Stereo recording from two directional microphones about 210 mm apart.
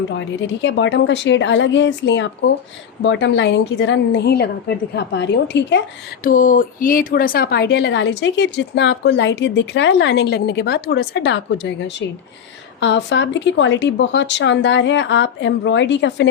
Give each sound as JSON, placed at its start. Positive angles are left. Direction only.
{"t": 0.2, "sound": "speech", "side_deg": 60}
{"t": 6.2, "sound": "a woman's voice", "side_deg": 40}